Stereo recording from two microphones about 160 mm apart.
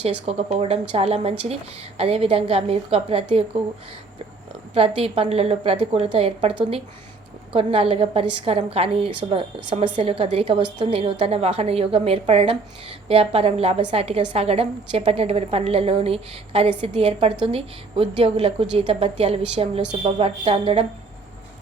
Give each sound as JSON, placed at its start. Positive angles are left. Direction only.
{"t": 0.0, "sound": "a woman's voice", "side_deg": -40}
{"t": 4.7, "sound": "a woman's voice", "side_deg": -35}
{"t": 7.5, "sound": "a woman's voice", "side_deg": -35}